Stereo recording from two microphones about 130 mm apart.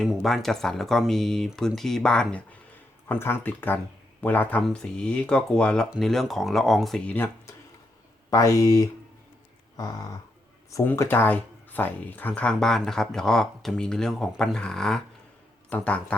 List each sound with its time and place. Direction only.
0.0 s speech: centre (ahead or behind)
8.3 s speech: 25° left (ahead or behind); by 16.1 s 10° left (ahead or behind)